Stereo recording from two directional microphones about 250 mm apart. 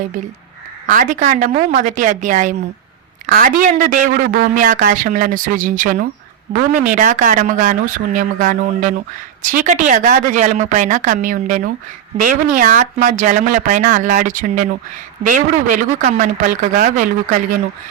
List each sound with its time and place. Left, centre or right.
0.9 s speech: right